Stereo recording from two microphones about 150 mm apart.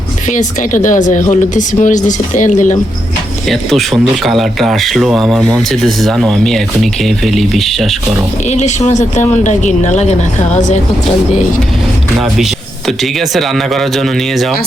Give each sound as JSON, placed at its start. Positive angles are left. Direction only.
{"t": 0.3, "sound": "speech", "side_deg": 55}
{"t": 3.5, "sound": "speech", "side_deg": 0}
{"t": 8.4, "sound": "speech", "side_deg": 50}
{"t": 12.1, "sound": "speech", "side_deg": 0}